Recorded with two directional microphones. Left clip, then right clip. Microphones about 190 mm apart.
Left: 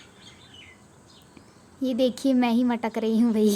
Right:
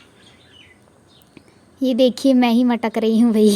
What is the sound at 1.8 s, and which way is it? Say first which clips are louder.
A woman's voice: right 8 dB; 30° right (ahead or behind).